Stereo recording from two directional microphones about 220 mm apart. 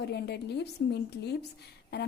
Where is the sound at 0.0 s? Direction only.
50° left (ahead or behind).